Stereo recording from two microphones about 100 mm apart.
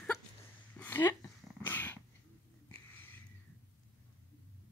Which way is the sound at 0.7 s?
20° left (ahead or behind).